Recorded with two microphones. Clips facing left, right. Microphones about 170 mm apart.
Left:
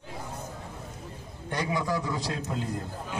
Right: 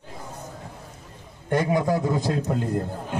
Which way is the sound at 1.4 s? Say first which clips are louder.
Right 8 dB; 50° right (ahead or behind).